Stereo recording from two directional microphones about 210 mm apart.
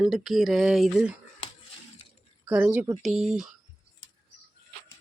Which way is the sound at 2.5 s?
5° right (ahead or behind).